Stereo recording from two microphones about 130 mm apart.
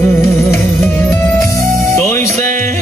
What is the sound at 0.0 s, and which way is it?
Music, 20° left (ahead or behind).